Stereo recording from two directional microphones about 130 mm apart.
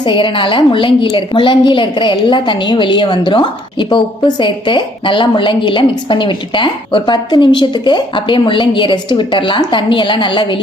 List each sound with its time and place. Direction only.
0.0 s a woman's voice: 40° left (ahead or behind)